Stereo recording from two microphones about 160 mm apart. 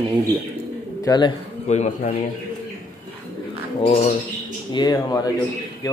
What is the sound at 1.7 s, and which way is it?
Speech, 45° left (ahead or behind).